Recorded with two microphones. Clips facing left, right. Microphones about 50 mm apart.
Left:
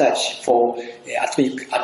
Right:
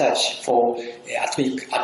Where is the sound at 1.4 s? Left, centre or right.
Left.